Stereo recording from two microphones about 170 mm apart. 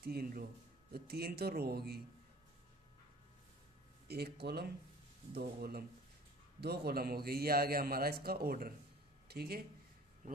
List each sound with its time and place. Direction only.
0.0 s a man's voice: 65° right (ahead or behind)
4.1 s a man's voice: 70° right (ahead or behind)